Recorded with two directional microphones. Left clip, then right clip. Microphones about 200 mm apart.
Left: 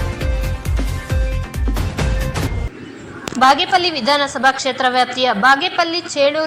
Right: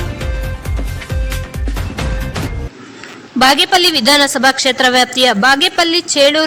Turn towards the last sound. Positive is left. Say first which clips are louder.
# right 5 dB
turn(degrees=-35)  # may be behind; listen again after turning